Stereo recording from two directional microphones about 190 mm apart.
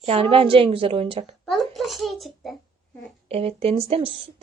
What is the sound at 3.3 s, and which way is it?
Speech, 30° right (ahead or behind).